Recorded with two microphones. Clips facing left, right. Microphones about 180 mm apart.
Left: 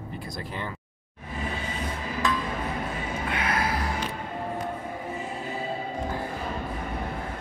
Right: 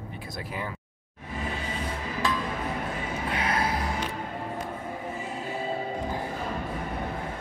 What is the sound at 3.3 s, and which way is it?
Music, 30° right (ahead or behind).